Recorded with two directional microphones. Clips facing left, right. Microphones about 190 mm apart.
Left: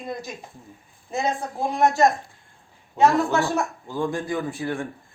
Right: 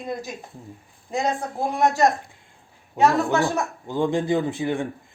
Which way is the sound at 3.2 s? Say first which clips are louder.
Right 1 dB; 15° right (ahead or behind).